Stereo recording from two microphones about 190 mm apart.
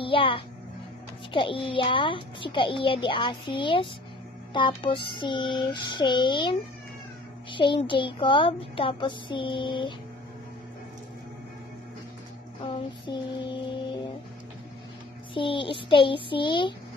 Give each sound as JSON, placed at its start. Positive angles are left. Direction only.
{"t": 0.0, "sound": "a child's voice", "side_deg": 25}
{"t": 7.5, "sound": "a child's voice", "side_deg": 25}
{"t": 12.6, "sound": "a child's voice", "side_deg": 25}
{"t": 15.3, "sound": "a child's voice", "side_deg": 25}